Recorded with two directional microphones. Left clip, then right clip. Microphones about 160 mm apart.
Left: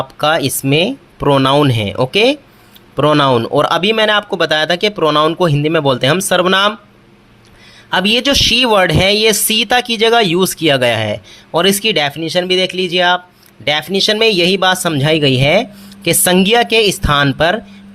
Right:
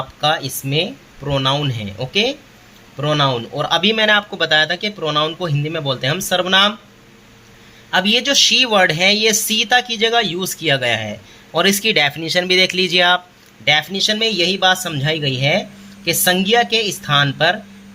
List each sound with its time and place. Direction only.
0.2 s speech: 45° left (ahead or behind)
7.9 s speech: 35° left (ahead or behind); by 13.2 s 10° left (ahead or behind)
13.7 s speech: 35° left (ahead or behind)